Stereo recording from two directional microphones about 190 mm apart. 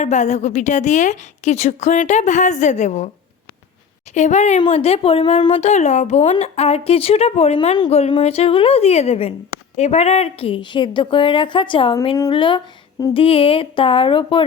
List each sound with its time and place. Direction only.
0.0 s a woman's voice: 40° left (ahead or behind)
4.1 s a woman's voice: 40° left (ahead or behind)